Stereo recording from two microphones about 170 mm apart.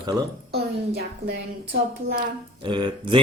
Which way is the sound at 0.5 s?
70° right (ahead or behind).